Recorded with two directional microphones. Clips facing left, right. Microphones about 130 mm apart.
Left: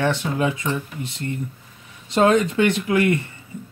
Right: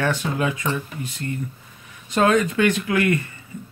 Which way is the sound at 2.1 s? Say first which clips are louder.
Left 1 dB; 25° left (ahead or behind).